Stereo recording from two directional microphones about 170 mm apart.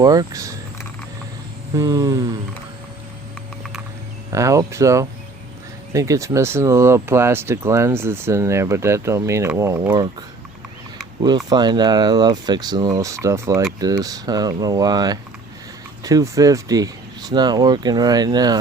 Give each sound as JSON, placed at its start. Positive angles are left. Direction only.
{"t": 0.0, "sound": "speech", "side_deg": -20}
{"t": 1.7, "sound": "speech", "side_deg": -20}
{"t": 4.3, "sound": "speech", "side_deg": -20}
{"t": 11.4, "sound": "speech", "side_deg": -25}